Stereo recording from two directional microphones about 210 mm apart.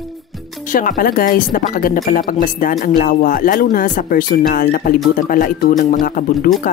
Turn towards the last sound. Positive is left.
turn(degrees=40)  # may be behind; listen again after turning